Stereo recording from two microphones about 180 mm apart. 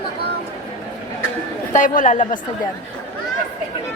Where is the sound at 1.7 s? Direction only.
45° left (ahead or behind).